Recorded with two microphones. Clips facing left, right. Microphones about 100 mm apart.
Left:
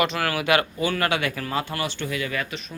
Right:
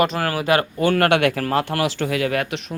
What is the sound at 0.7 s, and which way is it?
Speech, 55° right (ahead or behind).